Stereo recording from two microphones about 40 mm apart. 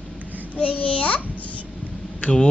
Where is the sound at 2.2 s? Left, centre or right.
Left.